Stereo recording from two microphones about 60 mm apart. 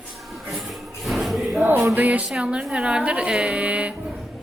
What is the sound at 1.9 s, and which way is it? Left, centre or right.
A woman's voice, right.